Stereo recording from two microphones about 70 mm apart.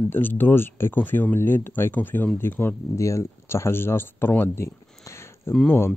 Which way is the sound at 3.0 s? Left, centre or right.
Left.